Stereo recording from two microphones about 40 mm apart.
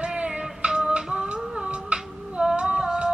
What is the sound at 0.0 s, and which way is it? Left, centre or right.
Music, right.